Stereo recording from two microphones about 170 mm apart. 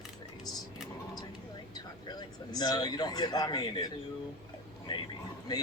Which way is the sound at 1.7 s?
25° left (ahead or behind).